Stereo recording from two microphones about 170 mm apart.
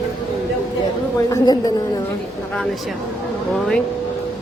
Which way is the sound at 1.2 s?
20° left (ahead or behind).